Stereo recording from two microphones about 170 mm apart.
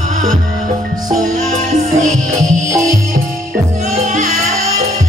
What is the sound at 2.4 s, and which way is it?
Music, 20° right (ahead or behind).